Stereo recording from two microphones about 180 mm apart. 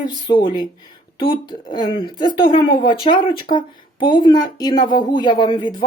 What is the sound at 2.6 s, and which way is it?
Speech, 55° left (ahead or behind).